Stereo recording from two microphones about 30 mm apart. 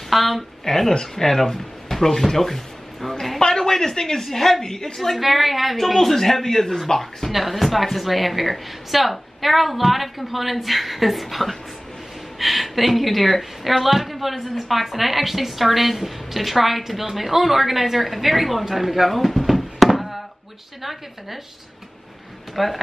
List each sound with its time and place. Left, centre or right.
0.1 s a woman's voice: centre
0.7 s a man's voice: centre
3.3 s speech: centre
4.3 s a man's voice: centre
4.6 s a woman's voice: centre
5.1 s a woman's voice: centre
5.9 s a man's voice: centre
7.2 s a woman's voice: centre
22.6 s a woman's voice: centre